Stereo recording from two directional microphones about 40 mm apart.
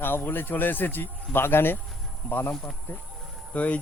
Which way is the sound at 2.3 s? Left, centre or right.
Left.